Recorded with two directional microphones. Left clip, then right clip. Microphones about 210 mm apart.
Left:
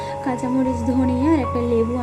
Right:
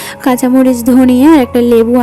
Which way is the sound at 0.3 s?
40° right (ahead or behind).